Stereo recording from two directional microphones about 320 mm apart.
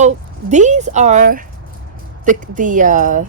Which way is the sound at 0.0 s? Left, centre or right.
Right.